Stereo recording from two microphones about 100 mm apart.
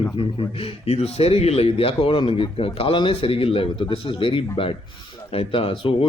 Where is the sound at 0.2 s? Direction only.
70° left (ahead or behind).